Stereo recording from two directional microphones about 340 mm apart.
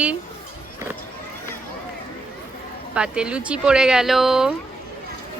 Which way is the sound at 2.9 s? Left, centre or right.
Centre.